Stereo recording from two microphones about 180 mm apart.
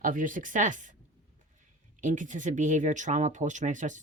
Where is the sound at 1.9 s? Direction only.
45° right (ahead or behind).